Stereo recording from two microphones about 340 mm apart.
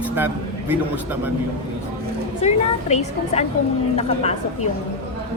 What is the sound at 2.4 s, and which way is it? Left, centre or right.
A woman's voice, centre.